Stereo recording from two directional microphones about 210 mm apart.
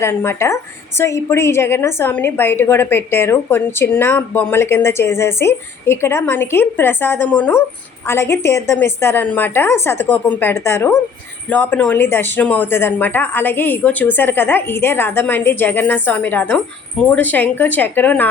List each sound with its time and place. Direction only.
0.0 s a woman's voice: 10° left (ahead or behind)